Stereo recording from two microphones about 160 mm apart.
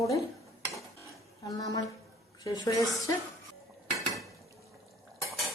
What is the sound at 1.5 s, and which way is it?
A woman's voice, 20° left (ahead or behind).